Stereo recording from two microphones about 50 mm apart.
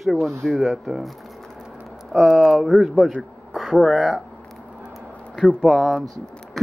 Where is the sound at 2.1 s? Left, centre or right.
Centre.